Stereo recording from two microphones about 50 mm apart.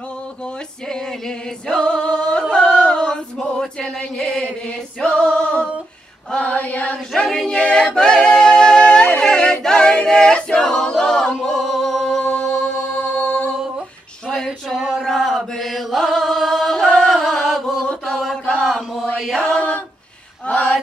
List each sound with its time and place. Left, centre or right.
1.7 s singing: centre
2.9 s choir: centre
5.0 s singing: centre
6.3 s female singing: left
7.2 s a capella: centre
11.4 s music: centre
14.3 s a sound: centre
15.0 s chant: centre
16.8 s music: centre
17.1 s chant: centre
19.3 s female singing: centre
20.4 s female singing: left